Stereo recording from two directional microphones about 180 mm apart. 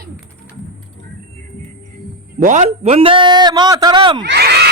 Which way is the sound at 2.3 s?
45° right (ahead or behind).